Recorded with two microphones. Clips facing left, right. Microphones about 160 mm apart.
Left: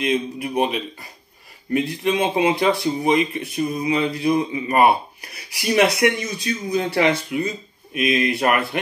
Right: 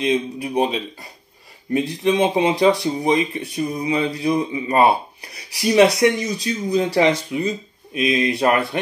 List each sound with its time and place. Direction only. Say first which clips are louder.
0.0 s speech: right 1 dB; 30° right (ahead or behind)